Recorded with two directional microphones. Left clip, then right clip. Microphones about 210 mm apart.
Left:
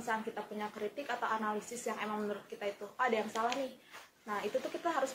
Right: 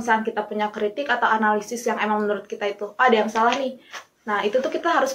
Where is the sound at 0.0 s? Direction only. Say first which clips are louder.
Right 16 dB; 35° left (ahead or behind).